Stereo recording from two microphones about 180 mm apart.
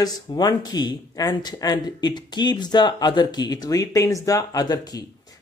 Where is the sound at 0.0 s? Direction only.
20° left (ahead or behind).